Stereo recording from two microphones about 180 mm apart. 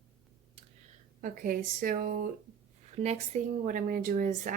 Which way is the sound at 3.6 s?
50° right (ahead or behind).